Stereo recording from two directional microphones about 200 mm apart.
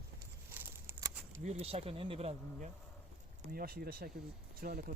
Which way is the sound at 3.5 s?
50° right (ahead or behind).